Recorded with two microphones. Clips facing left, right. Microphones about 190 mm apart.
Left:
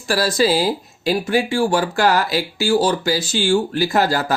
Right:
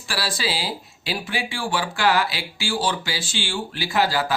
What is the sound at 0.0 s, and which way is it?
Speech, 45° left (ahead or behind).